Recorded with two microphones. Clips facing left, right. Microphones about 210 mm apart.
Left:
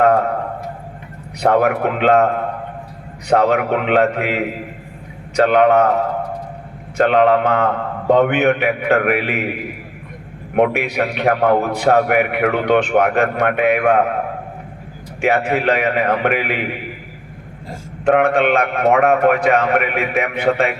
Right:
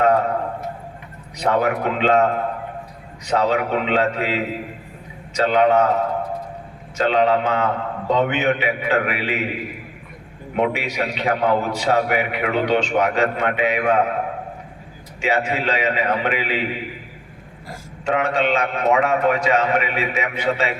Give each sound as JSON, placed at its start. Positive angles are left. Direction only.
{"t": 1.4, "sound": "a man's voice", "side_deg": 60}
{"t": 6.9, "sound": "a man's voice", "side_deg": 55}
{"t": 10.5, "sound": "a man's voice", "side_deg": 55}
{"t": 15.2, "sound": "a man's voice", "side_deg": 60}
{"t": 18.0, "sound": "a man's voice", "side_deg": 55}